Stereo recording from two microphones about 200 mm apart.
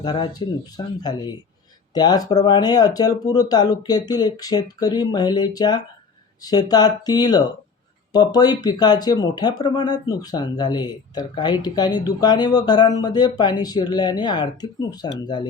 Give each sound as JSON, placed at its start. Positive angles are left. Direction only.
{"t": 0.0, "sound": "speech", "side_deg": 20}
{"t": 1.9, "sound": "speech", "side_deg": 20}